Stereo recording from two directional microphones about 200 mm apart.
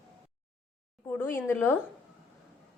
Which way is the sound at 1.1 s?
10° left (ahead or behind).